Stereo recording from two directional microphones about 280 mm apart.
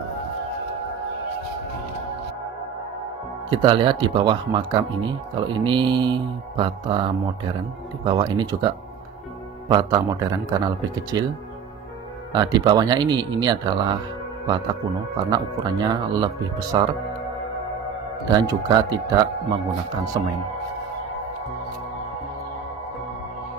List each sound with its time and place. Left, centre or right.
3.4 s a man's voice: centre
12.3 s a man's voice: centre
18.3 s a man's voice: centre